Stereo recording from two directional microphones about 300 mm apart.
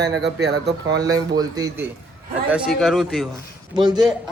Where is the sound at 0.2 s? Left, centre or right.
Right.